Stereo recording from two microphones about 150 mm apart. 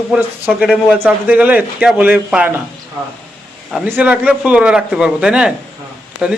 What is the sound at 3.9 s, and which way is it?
Speech, 10° right (ahead or behind).